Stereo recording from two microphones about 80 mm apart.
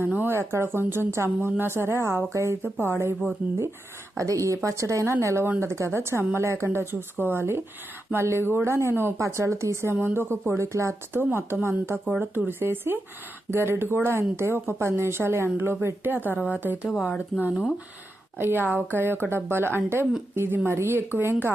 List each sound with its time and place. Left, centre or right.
0.0 s a woman's voice: right
4.2 s a woman's voice: right
11.2 s a woman's voice: right
16.9 s speech: centre
18.3 s a woman's voice: right